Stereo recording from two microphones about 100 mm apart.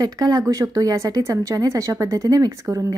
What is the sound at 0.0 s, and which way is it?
A woman's voice, 40° right (ahead or behind).